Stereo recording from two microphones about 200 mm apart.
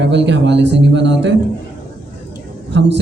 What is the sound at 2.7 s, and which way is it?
Speech, 60° right (ahead or behind).